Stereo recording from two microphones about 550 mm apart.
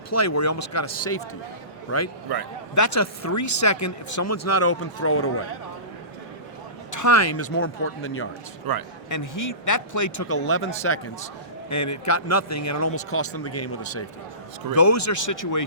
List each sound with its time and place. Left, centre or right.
0.1 s speech: left
2.3 s a man's voice: right
2.7 s speech: left
6.9 s speech: left
8.7 s a man's voice: right
9.0 s speech: left